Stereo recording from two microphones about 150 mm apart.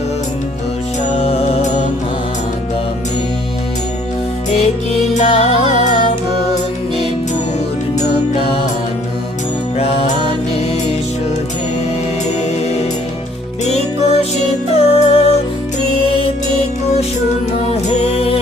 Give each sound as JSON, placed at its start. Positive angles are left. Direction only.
{"t": 1.2, "sound": "music", "side_deg": 40}
{"t": 5.1, "sound": "music", "side_deg": 45}
{"t": 7.9, "sound": "music", "side_deg": 40}
{"t": 9.7, "sound": "music", "side_deg": 40}
{"t": 13.7, "sound": "music", "side_deg": 45}
{"t": 17.7, "sound": "music", "side_deg": 45}